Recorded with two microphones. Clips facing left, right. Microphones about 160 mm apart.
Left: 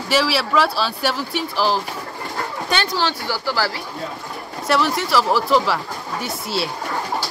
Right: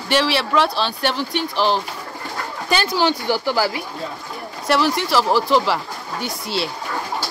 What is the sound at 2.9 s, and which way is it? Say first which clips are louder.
Speech: right 4 dB; 15° right (ahead or behind).